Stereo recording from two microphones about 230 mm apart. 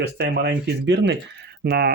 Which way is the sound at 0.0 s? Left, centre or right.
Right.